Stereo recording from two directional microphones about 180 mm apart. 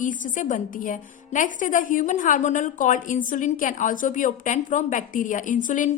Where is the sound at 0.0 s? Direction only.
45° left (ahead or behind).